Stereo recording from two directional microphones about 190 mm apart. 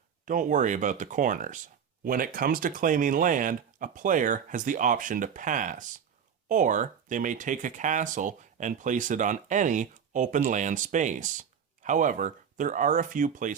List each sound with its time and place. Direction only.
0.3 s speech: 45° right (ahead or behind)